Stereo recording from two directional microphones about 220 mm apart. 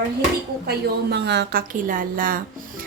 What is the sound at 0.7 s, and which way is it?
Speech, 45° right (ahead or behind).